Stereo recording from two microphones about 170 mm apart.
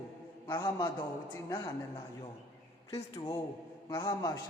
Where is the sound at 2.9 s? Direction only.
20° left (ahead or behind).